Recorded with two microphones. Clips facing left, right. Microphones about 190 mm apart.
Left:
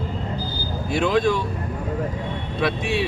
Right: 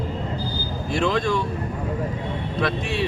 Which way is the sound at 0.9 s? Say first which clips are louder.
Left 3 dB; 5° left (ahead or behind).